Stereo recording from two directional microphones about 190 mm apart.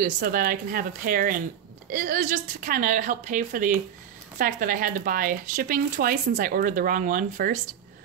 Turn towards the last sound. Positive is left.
turn(degrees=-45)  # may be behind; listen again after turning